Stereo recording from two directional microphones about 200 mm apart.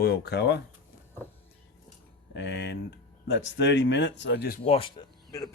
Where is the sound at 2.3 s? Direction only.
60° left (ahead or behind).